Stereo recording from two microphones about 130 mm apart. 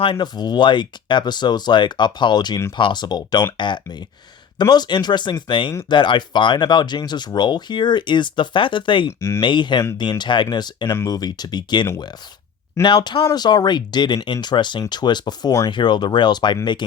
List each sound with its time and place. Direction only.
0.0 s speech: 40° left (ahead or behind)
10.8 s speech: 25° left (ahead or behind)
12.8 s speech: 20° left (ahead or behind)
13.2 s speech: 30° left (ahead or behind)